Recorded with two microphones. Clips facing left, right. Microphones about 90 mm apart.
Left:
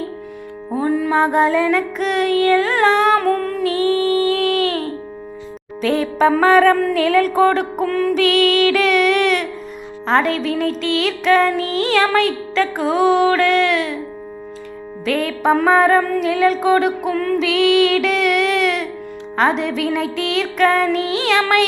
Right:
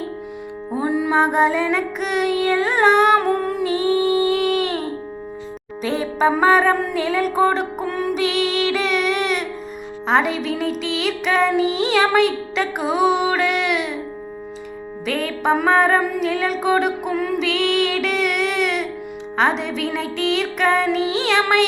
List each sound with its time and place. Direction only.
0.9 s music: 15° right (ahead or behind)
7.9 s music: 15° right (ahead or behind)
8.2 s music: 5° right (ahead or behind)
15.0 s music: centre (ahead or behind)
17.4 s music: centre (ahead or behind)